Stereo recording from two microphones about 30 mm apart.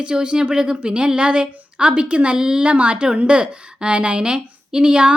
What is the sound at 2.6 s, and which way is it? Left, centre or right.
A woman's voice, right.